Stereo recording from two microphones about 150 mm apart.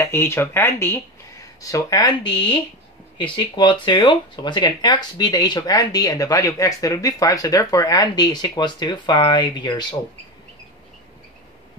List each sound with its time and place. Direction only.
0.0 s speech: 15° left (ahead or behind)